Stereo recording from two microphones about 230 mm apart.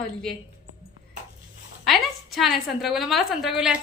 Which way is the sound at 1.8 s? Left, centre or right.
Centre.